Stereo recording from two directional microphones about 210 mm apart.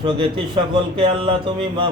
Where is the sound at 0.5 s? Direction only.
25° right (ahead or behind).